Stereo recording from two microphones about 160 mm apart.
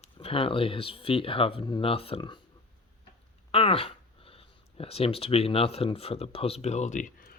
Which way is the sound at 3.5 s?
35° left (ahead or behind).